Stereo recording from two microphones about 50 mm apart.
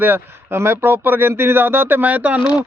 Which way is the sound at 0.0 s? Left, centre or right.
Right.